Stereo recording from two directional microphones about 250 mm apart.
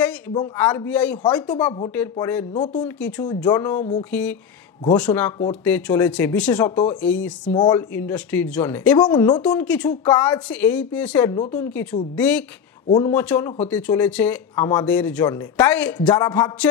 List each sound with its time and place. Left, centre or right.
0.3 s speech: centre
7.5 s speech: centre
7.9 s speech: centre
9.4 s speech: centre
16.3 s speech: centre